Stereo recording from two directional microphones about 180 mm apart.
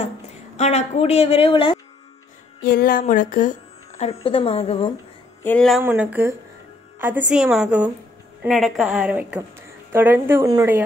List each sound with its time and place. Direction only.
0.6 s a woman's voice: 40° left (ahead or behind)
2.6 s a woman's voice: 55° left (ahead or behind); by 4.9 s 30° left (ahead or behind)
5.4 s speech: 5° left (ahead or behind)
5.8 s a woman's voice: 10° right (ahead or behind)